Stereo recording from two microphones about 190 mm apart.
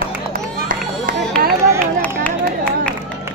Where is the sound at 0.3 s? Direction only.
45° right (ahead or behind).